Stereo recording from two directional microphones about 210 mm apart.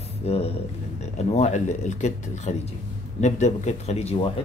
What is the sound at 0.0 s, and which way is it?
Speech, 30° left (ahead or behind).